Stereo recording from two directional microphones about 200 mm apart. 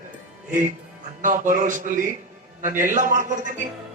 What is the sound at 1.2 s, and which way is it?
A man's voice, 40° right (ahead or behind).